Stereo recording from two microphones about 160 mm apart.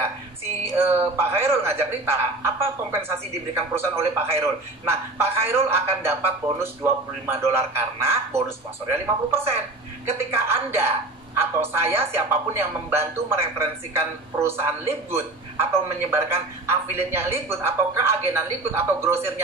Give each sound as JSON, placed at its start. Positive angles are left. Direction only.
{"t": 0.7, "sound": "a man's voice", "side_deg": -15}